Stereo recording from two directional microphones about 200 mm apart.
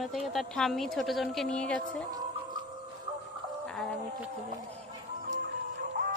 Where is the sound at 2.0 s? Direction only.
20° right (ahead or behind).